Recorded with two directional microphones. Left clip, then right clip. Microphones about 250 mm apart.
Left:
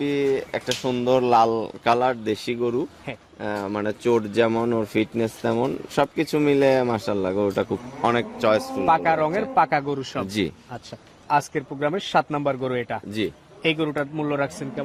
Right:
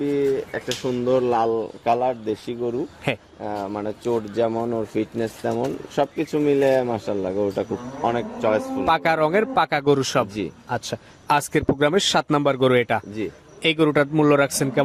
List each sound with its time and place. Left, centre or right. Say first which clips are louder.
0.0 s speech: right 1 dB; left
3.1 s speech: right 10 dB; right
3.4 s speech: left 2 dB; left
8.9 s a man's voice: right 1 dB; right